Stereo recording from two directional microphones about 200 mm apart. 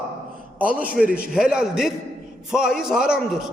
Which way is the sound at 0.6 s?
5° right (ahead or behind).